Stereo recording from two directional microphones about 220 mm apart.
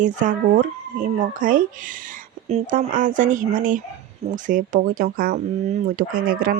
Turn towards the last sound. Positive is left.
turn(degrees=-40)  # may be behind; listen again after turning